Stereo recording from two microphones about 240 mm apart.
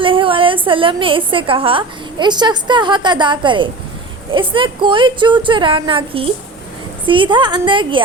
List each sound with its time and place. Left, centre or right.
0.0 s a woman's voice: right